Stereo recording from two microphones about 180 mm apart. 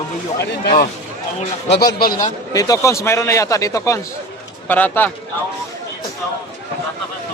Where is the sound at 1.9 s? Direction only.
55° left (ahead or behind).